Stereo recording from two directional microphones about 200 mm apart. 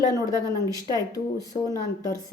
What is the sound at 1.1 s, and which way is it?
A woman's voice, 15° left (ahead or behind).